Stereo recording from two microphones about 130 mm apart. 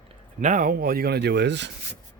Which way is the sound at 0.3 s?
85° right.